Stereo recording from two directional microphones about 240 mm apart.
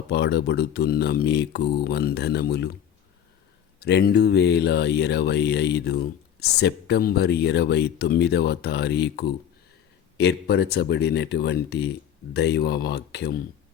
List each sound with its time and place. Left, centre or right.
0.1 s speech: left
3.8 s speech: left